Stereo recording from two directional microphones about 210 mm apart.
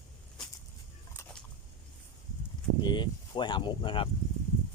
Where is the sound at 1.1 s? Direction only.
5° left (ahead or behind).